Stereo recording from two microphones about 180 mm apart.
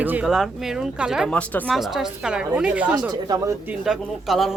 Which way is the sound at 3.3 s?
15° right (ahead or behind).